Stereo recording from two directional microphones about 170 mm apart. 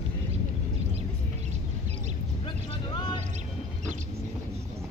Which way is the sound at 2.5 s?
30° left (ahead or behind).